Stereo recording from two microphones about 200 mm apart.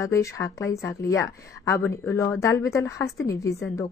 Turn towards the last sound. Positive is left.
turn(degrees=15)  # may be behind; listen again after turning